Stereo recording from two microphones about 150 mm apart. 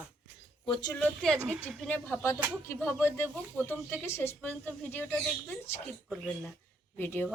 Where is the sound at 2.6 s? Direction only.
15° left (ahead or behind).